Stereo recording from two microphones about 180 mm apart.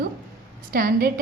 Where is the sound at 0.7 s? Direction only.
50° right (ahead or behind).